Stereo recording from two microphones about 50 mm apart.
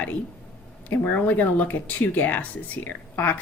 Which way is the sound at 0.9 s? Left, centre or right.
Left.